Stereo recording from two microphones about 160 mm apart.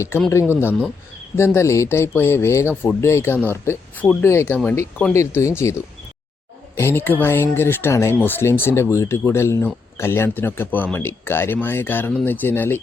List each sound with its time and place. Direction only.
0.1 s speech: 15° left (ahead or behind)